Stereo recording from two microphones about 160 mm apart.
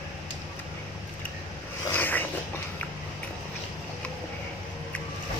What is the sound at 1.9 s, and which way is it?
Zipper, 10° left (ahead or behind).